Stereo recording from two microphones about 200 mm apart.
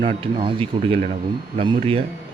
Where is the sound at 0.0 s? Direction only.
30° right (ahead or behind).